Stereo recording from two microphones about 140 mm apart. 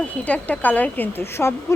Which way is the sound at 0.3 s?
10° left (ahead or behind).